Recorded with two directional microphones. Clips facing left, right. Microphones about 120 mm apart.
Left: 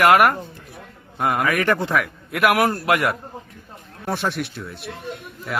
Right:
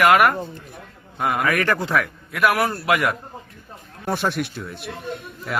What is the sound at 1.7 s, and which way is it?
A man's voice, 20° left (ahead or behind).